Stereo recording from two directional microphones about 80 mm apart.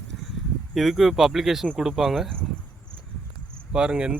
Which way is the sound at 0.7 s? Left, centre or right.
Centre.